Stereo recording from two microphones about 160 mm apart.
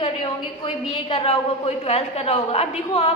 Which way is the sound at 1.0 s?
40° left (ahead or behind).